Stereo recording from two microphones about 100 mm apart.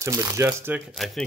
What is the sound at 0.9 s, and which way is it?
Speech, 5° left (ahead or behind).